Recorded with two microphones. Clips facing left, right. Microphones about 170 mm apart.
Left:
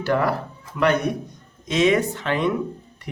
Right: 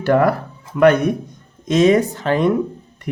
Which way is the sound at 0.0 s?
50° right (ahead or behind).